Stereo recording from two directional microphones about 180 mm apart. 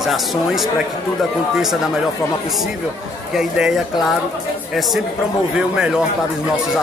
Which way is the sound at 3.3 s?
5° right (ahead or behind).